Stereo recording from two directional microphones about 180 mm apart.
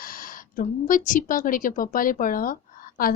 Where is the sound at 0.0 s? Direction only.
50° left (ahead or behind).